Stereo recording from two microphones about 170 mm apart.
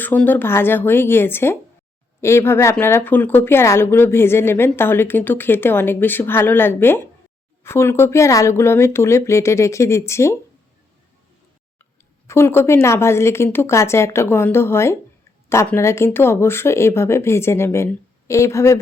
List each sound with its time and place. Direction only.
0.0 s speech: 10° left (ahead or behind)
12.3 s speech: 15° left (ahead or behind)